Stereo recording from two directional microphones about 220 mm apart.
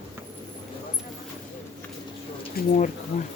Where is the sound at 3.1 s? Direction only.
30° left (ahead or behind).